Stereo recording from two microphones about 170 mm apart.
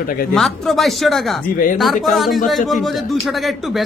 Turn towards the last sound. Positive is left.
turn(degrees=0)  # may be behind; listen again after turning